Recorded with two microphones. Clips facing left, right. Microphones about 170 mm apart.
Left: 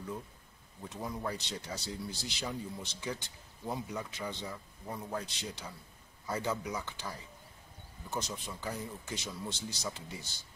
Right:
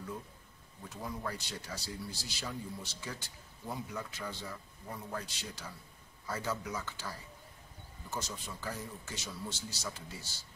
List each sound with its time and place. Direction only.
0.8 s a man's voice: 20° left (ahead or behind)